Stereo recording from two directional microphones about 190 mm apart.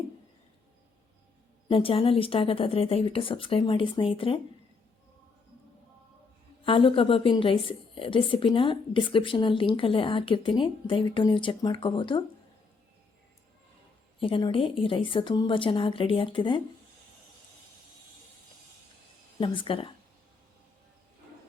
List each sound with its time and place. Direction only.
1.6 s a woman's voice: 30° left (ahead or behind)
6.7 s a woman's voice: 30° left (ahead or behind)
14.2 s a woman's voice: 25° left (ahead or behind)
19.4 s a woman's voice: 30° left (ahead or behind)